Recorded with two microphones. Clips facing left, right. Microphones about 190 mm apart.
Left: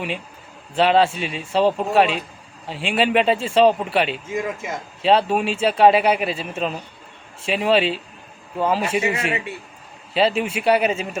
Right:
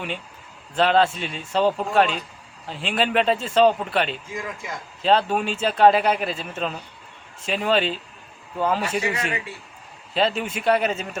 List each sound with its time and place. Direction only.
0.8 s speech: 5° left (ahead or behind)
4.3 s speech: 25° left (ahead or behind)
5.0 s speech: 5° left (ahead or behind)
9.0 s speech: 25° left (ahead or behind)
10.2 s speech: 5° left (ahead or behind)